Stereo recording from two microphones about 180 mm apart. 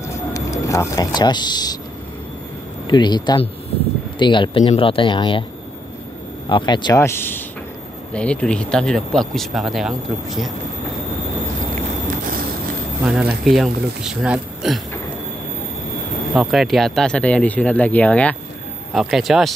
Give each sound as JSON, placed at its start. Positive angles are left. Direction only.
{"t": 0.0, "sound": "a sound", "side_deg": 15}
{"t": 2.9, "sound": "speech", "side_deg": 25}
{"t": 6.5, "sound": "speech", "side_deg": 25}
{"t": 13.0, "sound": "speech", "side_deg": 0}
{"t": 16.3, "sound": "speech", "side_deg": 0}